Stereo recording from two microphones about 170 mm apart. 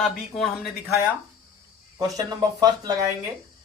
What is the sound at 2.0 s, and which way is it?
Speech, 20° right (ahead or behind).